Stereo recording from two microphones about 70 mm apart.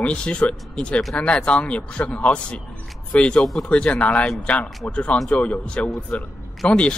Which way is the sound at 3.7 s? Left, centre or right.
Centre.